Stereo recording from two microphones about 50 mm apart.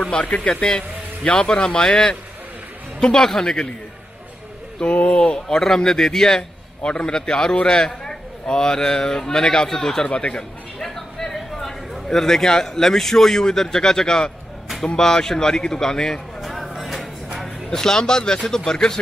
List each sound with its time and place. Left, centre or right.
0.0 s a man's voice: left
4.9 s a man's voice: left
10.0 s speech: left
10.8 s a man's voice: centre
16.3 s music: centre
17.6 s a man's voice: centre